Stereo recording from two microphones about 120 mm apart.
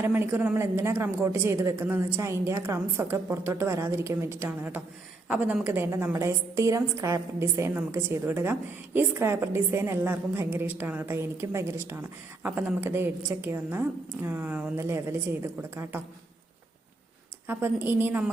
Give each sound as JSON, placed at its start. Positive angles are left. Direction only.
{"t": 0.0, "sound": "a woman's voice", "side_deg": -20}
{"t": 17.4, "sound": "a woman's voice", "side_deg": -15}